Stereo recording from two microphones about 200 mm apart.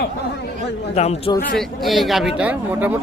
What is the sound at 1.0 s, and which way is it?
Speech, 30° left (ahead or behind).